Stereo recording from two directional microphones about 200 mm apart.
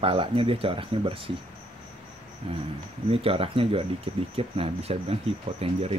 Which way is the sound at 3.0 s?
30° right (ahead or behind).